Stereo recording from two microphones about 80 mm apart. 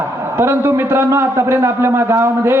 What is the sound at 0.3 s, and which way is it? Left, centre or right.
A man's voice, right.